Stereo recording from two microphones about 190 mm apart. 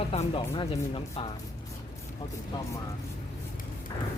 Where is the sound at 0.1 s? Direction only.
30° left (ahead or behind).